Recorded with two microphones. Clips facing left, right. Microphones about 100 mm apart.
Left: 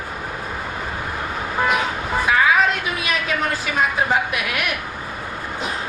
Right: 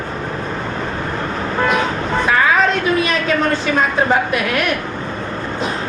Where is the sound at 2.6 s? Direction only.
10° left (ahead or behind).